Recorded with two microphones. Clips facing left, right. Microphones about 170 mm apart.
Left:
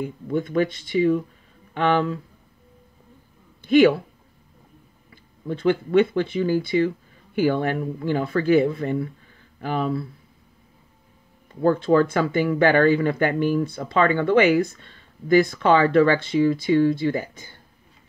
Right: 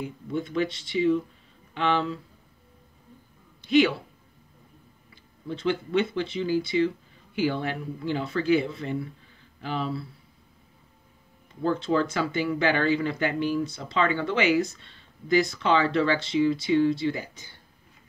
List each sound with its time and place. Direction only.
0.0 s speech: 50° left (ahead or behind)
3.6 s speech: 50° left (ahead or behind)
5.1 s speech: 50° left (ahead or behind)
11.6 s speech: 50° left (ahead or behind)